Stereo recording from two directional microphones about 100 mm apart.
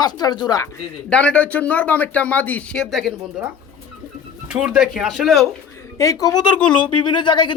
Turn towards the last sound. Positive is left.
turn(degrees=50)  # may be behind; listen again after turning